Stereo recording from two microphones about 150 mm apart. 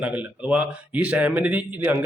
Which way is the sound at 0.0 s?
10° right (ahead or behind).